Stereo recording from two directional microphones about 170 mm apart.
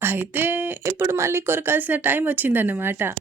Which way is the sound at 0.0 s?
10° right (ahead or behind).